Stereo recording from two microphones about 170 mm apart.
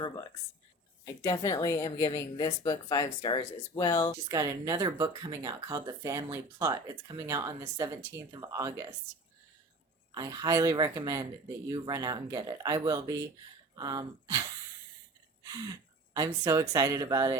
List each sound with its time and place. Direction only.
1.0 s a woman's voice: 20° left (ahead or behind)
4.3 s speech: 20° right (ahead or behind)
10.2 s speech: 20° right (ahead or behind)
15.4 s a sound: 20° right (ahead or behind)
16.1 s speech: 20° right (ahead or behind)